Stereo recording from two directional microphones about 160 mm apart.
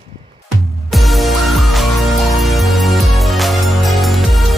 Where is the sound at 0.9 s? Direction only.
Centre (ahead or behind).